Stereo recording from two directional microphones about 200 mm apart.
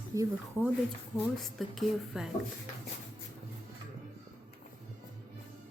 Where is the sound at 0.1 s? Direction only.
15° right (ahead or behind).